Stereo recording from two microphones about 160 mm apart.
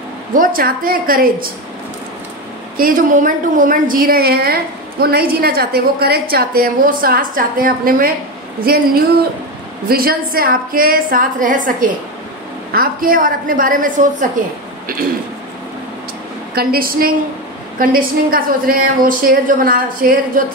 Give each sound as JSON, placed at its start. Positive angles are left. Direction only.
{"t": 0.3, "sound": "a woman's voice", "side_deg": -60}
{"t": 2.8, "sound": "a woman's voice", "side_deg": -55}
{"t": 16.5, "sound": "a woman's voice", "side_deg": -65}